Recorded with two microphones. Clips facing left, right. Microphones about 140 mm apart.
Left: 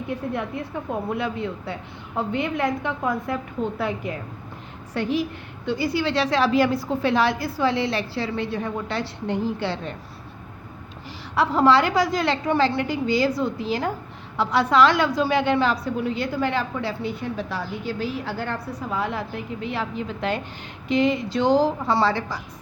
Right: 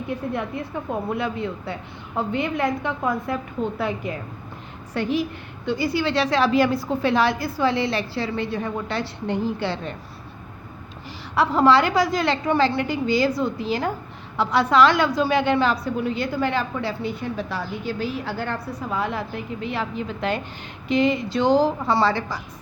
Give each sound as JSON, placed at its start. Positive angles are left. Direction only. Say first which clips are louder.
{"t": 1.1, "sound": "a woman's voice", "louder": "right 1 dB", "side_deg": -40}
{"t": 4.9, "sound": "a woman's voice", "louder": "right 1 dB", "side_deg": -60}
{"t": 11.3, "sound": "a woman's voice", "louder": "right 1 dB", "side_deg": -65}
{"t": 17.5, "sound": "a woman's voice", "louder": "right 1 dB", "side_deg": -65}